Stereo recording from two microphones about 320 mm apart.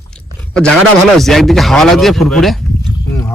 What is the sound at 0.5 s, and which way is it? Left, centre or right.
Speech, centre.